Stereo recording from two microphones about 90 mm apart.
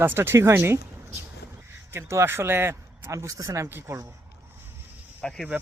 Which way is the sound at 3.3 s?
40° right (ahead or behind).